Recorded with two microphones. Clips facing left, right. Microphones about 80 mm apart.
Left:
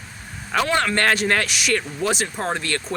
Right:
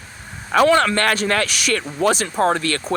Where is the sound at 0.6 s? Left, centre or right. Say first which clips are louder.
Right 4 dB; right.